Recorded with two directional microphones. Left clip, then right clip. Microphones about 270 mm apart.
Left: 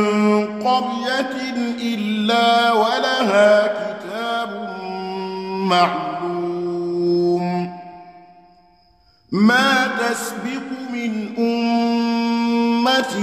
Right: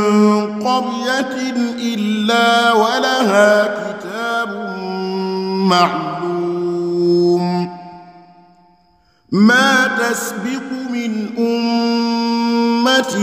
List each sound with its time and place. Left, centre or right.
0.0 s mantra: right
9.3 s mantra: right